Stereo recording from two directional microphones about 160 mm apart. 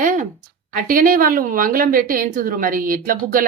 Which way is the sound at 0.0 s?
55° right (ahead or behind).